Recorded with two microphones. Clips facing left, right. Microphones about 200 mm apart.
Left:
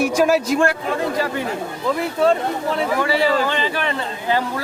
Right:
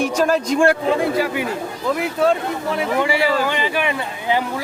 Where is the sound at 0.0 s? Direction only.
10° left (ahead or behind).